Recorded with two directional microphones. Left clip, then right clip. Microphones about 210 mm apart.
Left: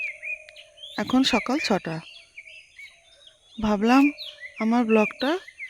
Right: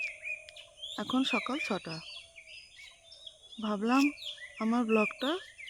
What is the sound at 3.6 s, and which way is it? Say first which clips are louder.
Speech: left 9 dB; 30° left (ahead or behind).